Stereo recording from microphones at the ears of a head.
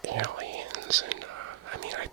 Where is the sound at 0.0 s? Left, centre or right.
Right.